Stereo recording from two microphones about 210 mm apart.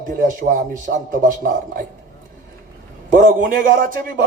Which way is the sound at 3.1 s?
40° right (ahead or behind).